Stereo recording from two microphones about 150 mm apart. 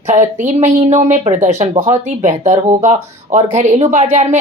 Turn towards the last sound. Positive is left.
turn(degrees=-55)  # may be behind; listen again after turning